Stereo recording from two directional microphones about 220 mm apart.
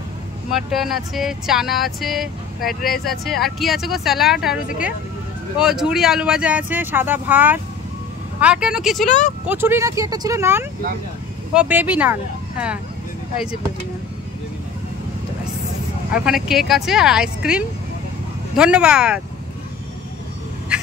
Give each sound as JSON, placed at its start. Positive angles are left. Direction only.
{"t": 0.5, "sound": "speech", "side_deg": 0}
{"t": 16.1, "sound": "speech", "side_deg": -5}
{"t": 20.7, "sound": "duck", "side_deg": -5}